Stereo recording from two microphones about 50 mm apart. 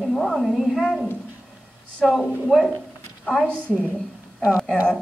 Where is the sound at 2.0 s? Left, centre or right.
Centre.